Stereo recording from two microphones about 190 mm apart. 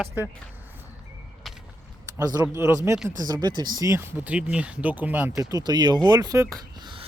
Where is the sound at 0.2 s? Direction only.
10° right (ahead or behind).